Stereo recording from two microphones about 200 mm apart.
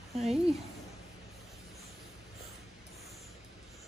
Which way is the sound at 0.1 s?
30° right (ahead or behind).